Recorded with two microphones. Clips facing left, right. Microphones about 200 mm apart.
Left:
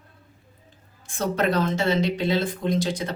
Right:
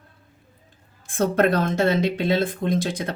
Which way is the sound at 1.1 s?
55° right (ahead or behind).